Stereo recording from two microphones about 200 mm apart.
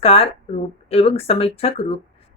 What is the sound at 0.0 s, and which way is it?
Speech, 30° left (ahead or behind).